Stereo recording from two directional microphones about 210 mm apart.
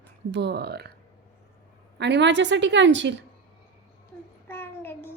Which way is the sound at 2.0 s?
55° right (ahead or behind).